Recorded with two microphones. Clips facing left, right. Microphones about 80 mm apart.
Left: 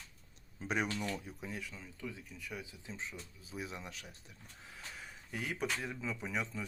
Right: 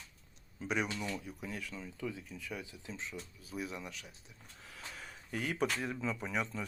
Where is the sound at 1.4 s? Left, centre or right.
Centre.